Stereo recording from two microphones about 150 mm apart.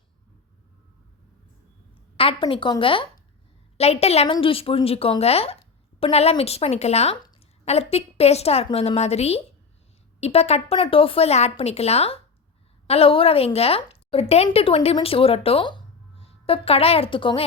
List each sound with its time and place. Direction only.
2.1 s a woman's voice: 40° left (ahead or behind)